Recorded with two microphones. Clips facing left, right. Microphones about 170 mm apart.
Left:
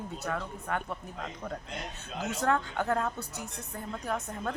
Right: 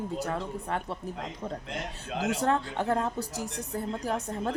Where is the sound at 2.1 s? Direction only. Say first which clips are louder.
Right 6 dB; 90° right.